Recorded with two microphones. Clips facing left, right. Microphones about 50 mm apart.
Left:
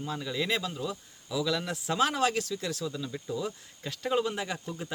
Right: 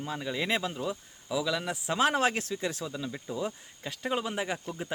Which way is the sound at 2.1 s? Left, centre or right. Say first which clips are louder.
Right 1 dB; right.